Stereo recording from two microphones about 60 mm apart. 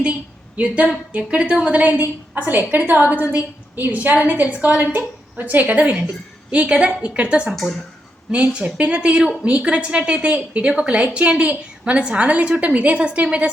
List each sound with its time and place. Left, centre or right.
0.0 s a woman's voice: right